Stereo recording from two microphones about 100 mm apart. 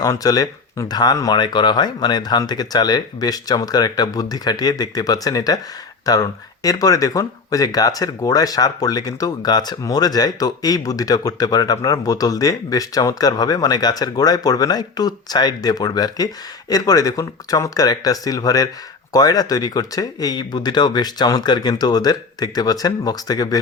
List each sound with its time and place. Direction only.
0.0 s speech: 35° left (ahead or behind)